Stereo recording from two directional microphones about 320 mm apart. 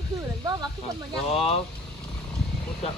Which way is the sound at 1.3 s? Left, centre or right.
Centre.